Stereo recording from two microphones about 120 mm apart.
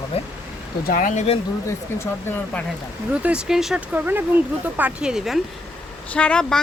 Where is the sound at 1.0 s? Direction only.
75° left (ahead or behind).